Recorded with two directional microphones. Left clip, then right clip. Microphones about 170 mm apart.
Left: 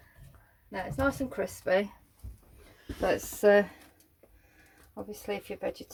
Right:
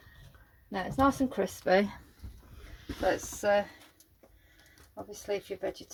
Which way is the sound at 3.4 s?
55° left (ahead or behind).